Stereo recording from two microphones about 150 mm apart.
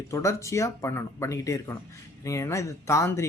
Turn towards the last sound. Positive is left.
turn(degrees=20)  # may be behind; listen again after turning